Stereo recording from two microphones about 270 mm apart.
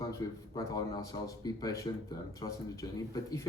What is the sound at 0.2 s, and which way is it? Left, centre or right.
Speech, centre.